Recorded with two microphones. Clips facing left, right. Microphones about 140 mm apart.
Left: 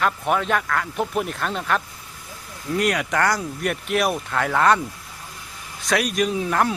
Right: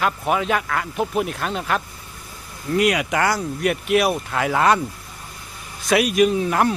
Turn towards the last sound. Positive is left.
turn(degrees=0)  # may be behind; listen again after turning